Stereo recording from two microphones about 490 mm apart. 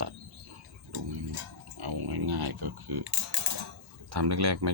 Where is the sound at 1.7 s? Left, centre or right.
Right.